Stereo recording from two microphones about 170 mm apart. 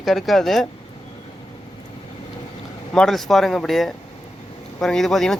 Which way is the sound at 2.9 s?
Centre (ahead or behind).